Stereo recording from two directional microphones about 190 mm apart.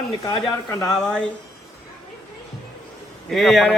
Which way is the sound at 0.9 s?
5° left (ahead or behind).